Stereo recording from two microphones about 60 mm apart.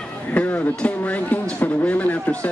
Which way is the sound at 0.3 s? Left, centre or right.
Left.